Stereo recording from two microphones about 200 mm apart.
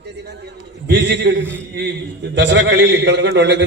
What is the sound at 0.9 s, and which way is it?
A man's voice, 60° right (ahead or behind).